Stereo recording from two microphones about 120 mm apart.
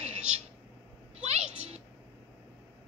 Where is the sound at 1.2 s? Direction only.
60° right (ahead or behind).